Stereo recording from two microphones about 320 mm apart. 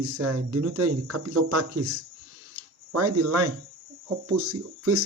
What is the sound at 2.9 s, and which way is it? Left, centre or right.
Speech, right.